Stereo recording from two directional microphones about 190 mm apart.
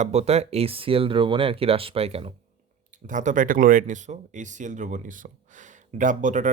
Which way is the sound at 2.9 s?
40° right (ahead or behind).